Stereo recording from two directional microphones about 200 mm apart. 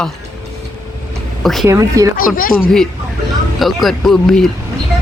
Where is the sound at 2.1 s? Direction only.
45° left (ahead or behind).